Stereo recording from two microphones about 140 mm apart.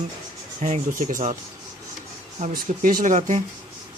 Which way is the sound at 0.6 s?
65° right (ahead or behind).